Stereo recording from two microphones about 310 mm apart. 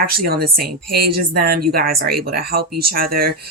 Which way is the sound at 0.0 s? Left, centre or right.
Right.